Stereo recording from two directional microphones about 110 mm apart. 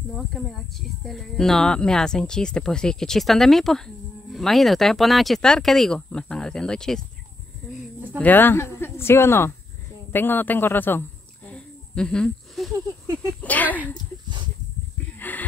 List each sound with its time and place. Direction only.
0.3 s speech: centre (ahead or behind)
8.2 s a woman's voice: 15° left (ahead or behind)
15.1 s a sound: 15° left (ahead or behind)